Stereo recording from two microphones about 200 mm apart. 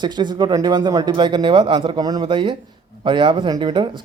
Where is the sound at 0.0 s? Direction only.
20° right (ahead or behind).